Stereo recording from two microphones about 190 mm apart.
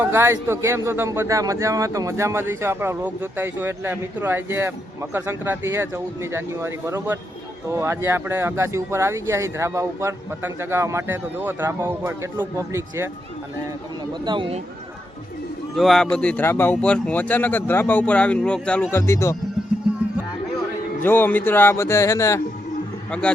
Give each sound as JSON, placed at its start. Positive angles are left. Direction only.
{"t": 0.0, "sound": "speech", "side_deg": -10}
{"t": 14.3, "sound": "speech", "side_deg": -25}
{"t": 15.7, "sound": "speech", "side_deg": 0}
{"t": 21.0, "sound": "speech", "side_deg": 10}